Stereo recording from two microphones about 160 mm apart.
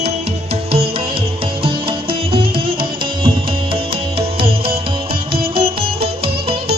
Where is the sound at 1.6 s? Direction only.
35° right (ahead or behind).